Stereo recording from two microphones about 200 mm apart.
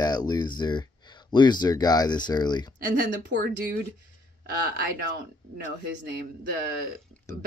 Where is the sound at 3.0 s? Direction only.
55° right (ahead or behind).